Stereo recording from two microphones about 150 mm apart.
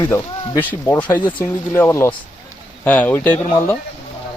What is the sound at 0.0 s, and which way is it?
Speech, 15° left (ahead or behind).